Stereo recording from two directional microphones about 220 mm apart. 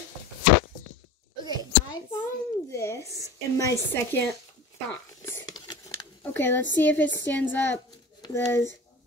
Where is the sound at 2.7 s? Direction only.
15° left (ahead or behind).